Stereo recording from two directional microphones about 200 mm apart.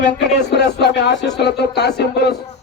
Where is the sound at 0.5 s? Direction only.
60° left (ahead or behind).